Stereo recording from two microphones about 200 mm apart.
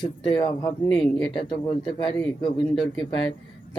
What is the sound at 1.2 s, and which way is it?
Speech, 20° left (ahead or behind).